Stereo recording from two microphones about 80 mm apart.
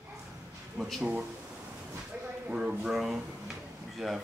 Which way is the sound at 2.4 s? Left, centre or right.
Centre.